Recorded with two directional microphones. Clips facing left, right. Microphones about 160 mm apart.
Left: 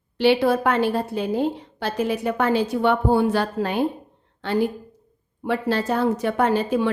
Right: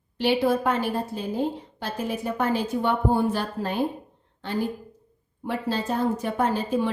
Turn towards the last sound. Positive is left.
turn(degrees=80)